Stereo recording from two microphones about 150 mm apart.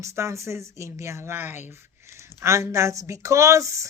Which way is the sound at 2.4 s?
20° right (ahead or behind).